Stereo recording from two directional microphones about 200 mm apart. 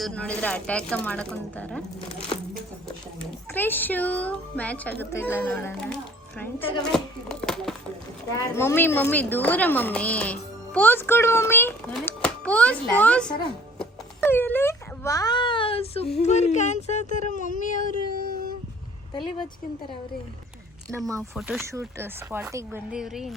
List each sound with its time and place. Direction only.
0.0 s speech: 5° left (ahead or behind)
3.5 s a child's voice: 10° left (ahead or behind)
6.6 s speech: 25° left (ahead or behind)
6.9 s a sound: 5° left (ahead or behind)
8.3 s a child's voice: 10° left (ahead or behind)
14.2 s wail: 10° left (ahead or behind); by 16.0 s 30° left (ahead or behind)
16.1 s speech: 35° left (ahead or behind)
20.9 s speech: 15° right (ahead or behind)
21.3 s speech: centre (ahead or behind)
21.6 s speech: 15° right (ahead or behind)